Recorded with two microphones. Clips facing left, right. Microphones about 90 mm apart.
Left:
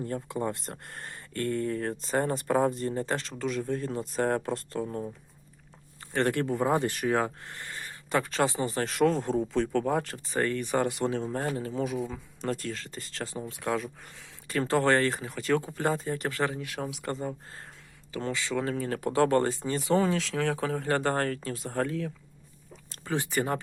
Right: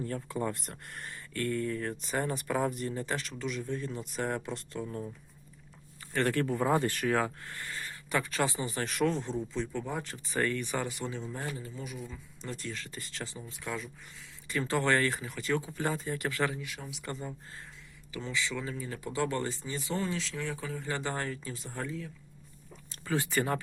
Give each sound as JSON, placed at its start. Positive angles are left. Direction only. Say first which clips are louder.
{"t": 0.0, "sound": "speech", "louder": "left 2 dB", "side_deg": 25}
{"t": 6.1, "sound": "speech", "louder": "left 2 dB", "side_deg": 25}
{"t": 9.5, "sound": "speech", "louder": "left 8 dB", "side_deg": 65}
{"t": 10.0, "sound": "speech", "louder": "left 3 dB", "side_deg": 40}
{"t": 11.0, "sound": "speech", "louder": "left 8 dB", "side_deg": 50}
{"t": 11.6, "sound": "speech", "louder": "left 11 dB", "side_deg": 85}
{"t": 12.7, "sound": "speech", "louder": "left 3 dB", "side_deg": 35}
{"t": 13.4, "sound": "speech", "louder": "left 9 dB", "side_deg": 60}
{"t": 14.4, "sound": "speech", "louder": "left 5 dB", "side_deg": 45}
{"t": 18.3, "sound": "speech", "louder": "left 1 dB", "side_deg": 45}
{"t": 18.6, "sound": "speech", "louder": "left 8 dB", "side_deg": 70}
{"t": 20.0, "sound": "speech", "louder": "left 8 dB", "side_deg": 90}
{"t": 21.8, "sound": "speech", "louder": "left 7 dB", "side_deg": 90}
{"t": 23.0, "sound": "speech", "louder": "left 1 dB", "side_deg": 20}